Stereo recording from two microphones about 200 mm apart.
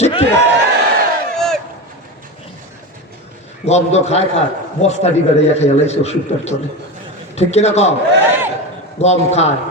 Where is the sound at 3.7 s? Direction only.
35° left (ahead or behind).